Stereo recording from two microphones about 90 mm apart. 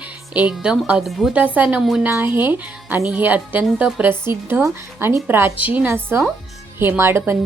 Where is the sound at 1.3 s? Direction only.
20° right (ahead or behind).